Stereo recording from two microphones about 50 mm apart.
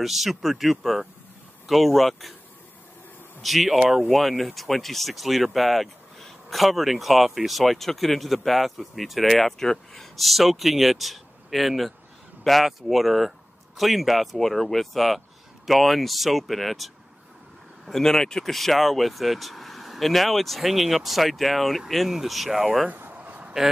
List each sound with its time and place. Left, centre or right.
0.0 s speech: centre
3.4 s speech: centre
22.9 s a sound: right